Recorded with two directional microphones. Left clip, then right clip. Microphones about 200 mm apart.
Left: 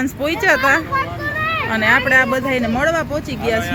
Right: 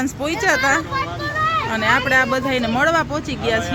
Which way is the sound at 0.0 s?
Centre (ahead or behind).